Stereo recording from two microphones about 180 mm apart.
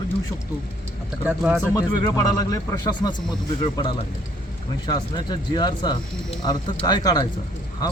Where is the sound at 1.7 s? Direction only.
20° left (ahead or behind).